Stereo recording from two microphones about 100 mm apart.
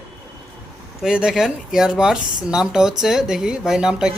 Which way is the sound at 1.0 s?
5° right (ahead or behind).